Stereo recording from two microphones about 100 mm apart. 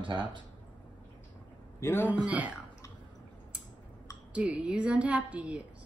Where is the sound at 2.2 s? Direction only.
15° right (ahead or behind).